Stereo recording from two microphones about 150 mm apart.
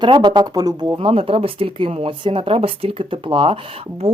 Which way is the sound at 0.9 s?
40° right (ahead or behind).